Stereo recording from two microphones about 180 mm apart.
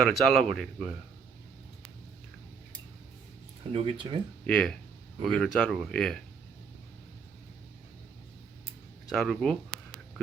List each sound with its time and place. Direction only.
0.0 s speech: centre (ahead or behind)
3.7 s speech: 30° right (ahead or behind)
4.4 s speech: 5° left (ahead or behind)
9.0 s speech: centre (ahead or behind)